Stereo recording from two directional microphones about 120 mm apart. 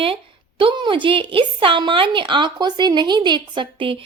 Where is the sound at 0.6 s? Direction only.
40° right (ahead or behind).